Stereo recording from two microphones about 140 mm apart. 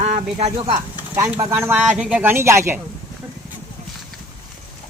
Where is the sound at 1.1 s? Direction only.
20° right (ahead or behind).